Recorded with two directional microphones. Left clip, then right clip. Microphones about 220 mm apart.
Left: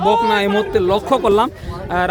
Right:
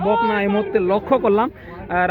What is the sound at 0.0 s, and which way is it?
A man's voice, 10° left (ahead or behind).